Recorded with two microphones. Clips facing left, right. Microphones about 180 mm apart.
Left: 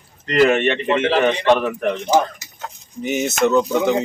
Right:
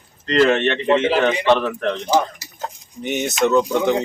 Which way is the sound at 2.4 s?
35° right (ahead or behind).